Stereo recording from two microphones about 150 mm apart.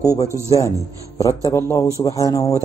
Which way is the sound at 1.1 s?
25° left (ahead or behind).